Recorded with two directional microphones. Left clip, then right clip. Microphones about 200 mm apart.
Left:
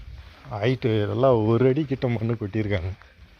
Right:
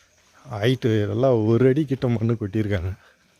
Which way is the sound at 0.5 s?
35° right (ahead or behind).